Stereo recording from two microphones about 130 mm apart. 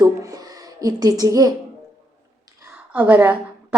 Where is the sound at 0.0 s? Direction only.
25° right (ahead or behind).